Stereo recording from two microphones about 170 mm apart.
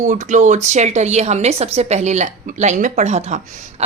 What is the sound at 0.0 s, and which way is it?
A woman's voice, 45° right (ahead or behind).